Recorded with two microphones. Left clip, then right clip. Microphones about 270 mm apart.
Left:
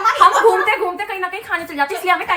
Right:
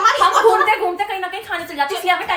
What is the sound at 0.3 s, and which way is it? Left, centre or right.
A woman's voice, centre.